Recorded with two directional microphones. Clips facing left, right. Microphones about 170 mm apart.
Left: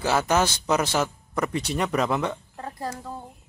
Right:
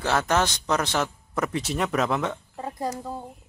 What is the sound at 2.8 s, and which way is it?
Speech, 15° right (ahead or behind).